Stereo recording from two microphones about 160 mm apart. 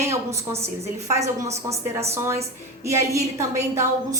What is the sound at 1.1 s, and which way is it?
A woman's voice, 20° right (ahead or behind).